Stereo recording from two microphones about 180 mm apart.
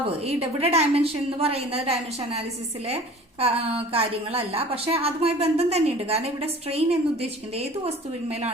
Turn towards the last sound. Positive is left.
turn(degrees=-35)  # may be behind; listen again after turning